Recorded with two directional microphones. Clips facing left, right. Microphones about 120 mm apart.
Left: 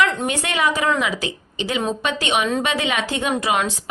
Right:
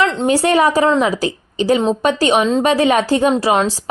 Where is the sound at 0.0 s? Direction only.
35° right (ahead or behind).